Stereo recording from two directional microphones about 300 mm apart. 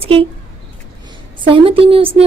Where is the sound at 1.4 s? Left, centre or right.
Centre.